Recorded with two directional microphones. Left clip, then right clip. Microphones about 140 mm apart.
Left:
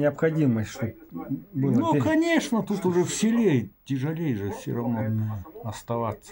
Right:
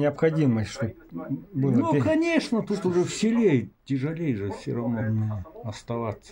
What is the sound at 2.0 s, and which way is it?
Speech, 20° left (ahead or behind).